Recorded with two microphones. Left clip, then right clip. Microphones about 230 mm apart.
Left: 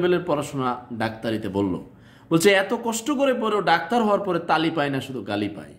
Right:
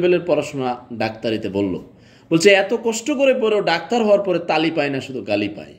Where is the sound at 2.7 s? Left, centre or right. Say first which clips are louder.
Right 5 dB; left.